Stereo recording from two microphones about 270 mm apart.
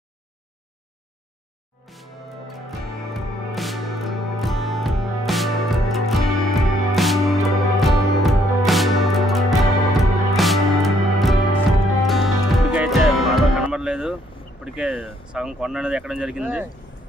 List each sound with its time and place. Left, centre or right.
2.5 s music: centre
14.6 s speech: centre